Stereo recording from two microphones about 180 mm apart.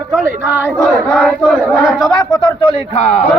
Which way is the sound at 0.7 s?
Centre (ahead or behind).